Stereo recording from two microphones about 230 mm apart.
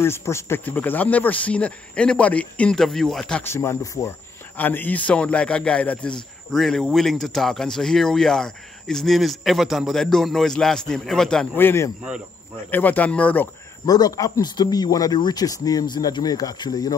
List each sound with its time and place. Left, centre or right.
0.0 s a man's voice: centre